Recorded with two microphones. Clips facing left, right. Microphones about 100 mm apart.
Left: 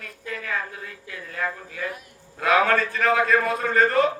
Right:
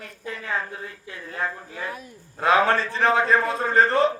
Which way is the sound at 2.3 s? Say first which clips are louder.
Right 1 dB; 30° right (ahead or behind).